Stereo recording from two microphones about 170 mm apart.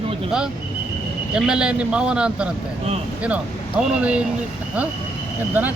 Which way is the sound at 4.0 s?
5° right (ahead or behind).